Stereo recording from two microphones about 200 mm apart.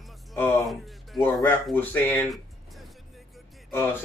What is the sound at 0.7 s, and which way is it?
Speech, centre (ahead or behind).